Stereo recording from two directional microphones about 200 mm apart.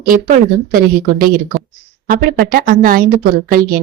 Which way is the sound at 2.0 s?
45° right (ahead or behind).